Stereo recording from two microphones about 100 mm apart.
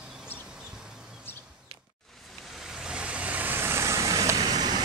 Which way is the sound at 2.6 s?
5° right (ahead or behind).